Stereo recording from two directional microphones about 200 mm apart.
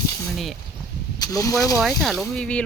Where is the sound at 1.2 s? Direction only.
15° left (ahead or behind).